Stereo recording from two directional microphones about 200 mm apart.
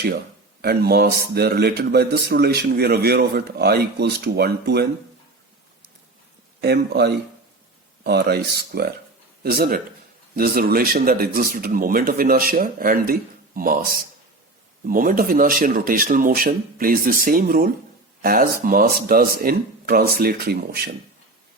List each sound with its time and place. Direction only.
0.6 s speech: 50° right (ahead or behind)
6.6 s speech: 55° right (ahead or behind)